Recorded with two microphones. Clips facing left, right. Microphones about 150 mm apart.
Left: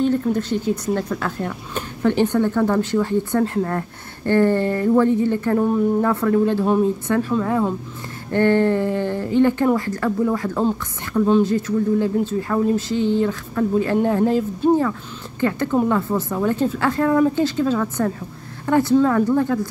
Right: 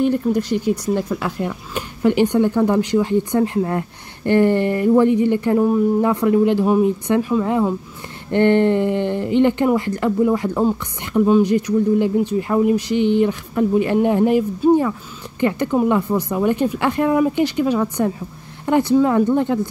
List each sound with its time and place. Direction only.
0.0 s speech: 10° right (ahead or behind)